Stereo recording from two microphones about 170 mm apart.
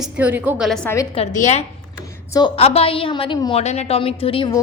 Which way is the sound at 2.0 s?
20° left (ahead or behind).